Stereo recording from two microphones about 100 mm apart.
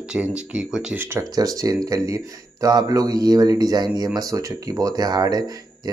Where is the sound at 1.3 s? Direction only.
40° right (ahead or behind).